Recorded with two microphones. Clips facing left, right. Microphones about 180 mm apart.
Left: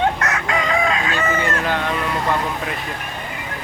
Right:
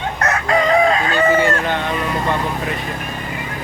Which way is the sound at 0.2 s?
35° right (ahead or behind).